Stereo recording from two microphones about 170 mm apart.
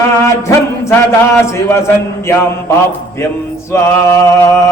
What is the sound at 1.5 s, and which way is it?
Mantra, 15° left (ahead or behind).